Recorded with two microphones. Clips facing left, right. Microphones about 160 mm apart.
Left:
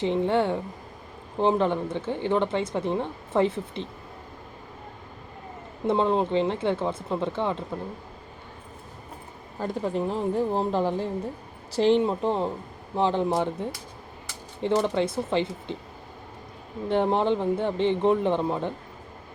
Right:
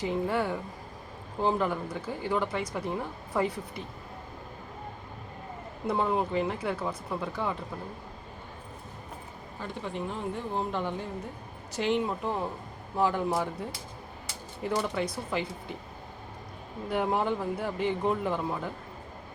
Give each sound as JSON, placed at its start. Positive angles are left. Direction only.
{"t": 0.0, "sound": "speech", "side_deg": 25}
{"t": 5.8, "sound": "speech", "side_deg": 25}
{"t": 9.6, "sound": "speech", "side_deg": 40}
{"t": 16.9, "sound": "speech", "side_deg": 25}